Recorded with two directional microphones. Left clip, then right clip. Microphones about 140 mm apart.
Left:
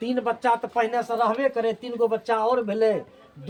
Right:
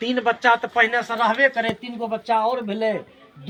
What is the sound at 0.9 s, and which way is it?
Speech, 15° left (ahead or behind).